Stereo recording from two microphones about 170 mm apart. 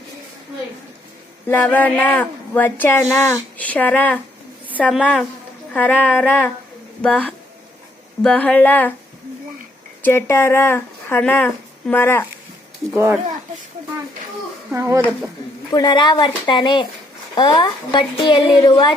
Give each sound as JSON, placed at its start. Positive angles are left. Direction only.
{"t": 1.5, "sound": "a woman's voice", "side_deg": 10}
{"t": 10.0, "sound": "speech", "side_deg": 15}
{"t": 14.7, "sound": "speech", "side_deg": -15}
{"t": 15.7, "sound": "a woman's voice", "side_deg": 25}